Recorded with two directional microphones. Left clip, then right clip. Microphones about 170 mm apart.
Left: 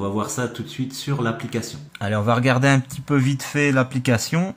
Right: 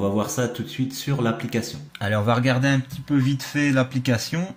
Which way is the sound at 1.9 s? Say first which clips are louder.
Left 1 dB; 15° left (ahead or behind).